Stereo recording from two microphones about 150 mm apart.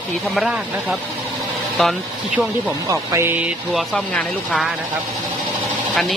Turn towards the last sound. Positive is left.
turn(degrees=5)  # may be behind; listen again after turning